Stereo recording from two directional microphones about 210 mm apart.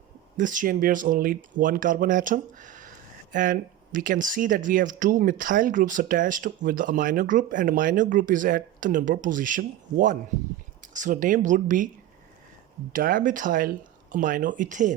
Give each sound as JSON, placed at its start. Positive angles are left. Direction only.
{"t": 0.3, "sound": "speech", "side_deg": -40}
{"t": 12.9, "sound": "speech", "side_deg": -40}